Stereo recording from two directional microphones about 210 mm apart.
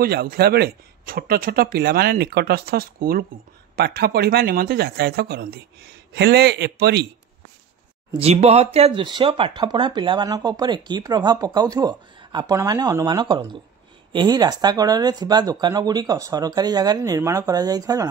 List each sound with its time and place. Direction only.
0.0 s speech: 45° right (ahead or behind)
8.1 s speech: 30° right (ahead or behind)